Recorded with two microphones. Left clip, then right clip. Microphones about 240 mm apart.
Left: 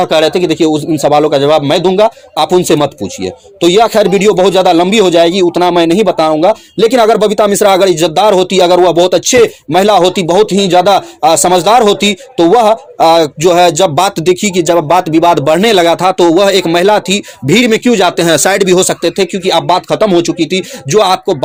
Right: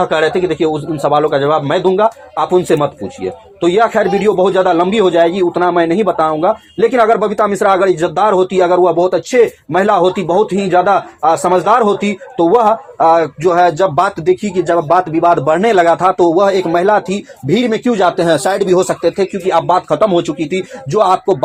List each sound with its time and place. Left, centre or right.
0.0 s a man's voice: left